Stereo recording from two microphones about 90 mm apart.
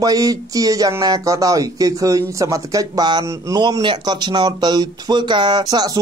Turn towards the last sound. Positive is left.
turn(degrees=-45)  # may be behind; listen again after turning